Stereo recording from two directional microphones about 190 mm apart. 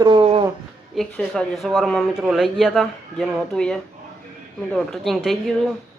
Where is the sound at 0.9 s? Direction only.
Centre (ahead or behind).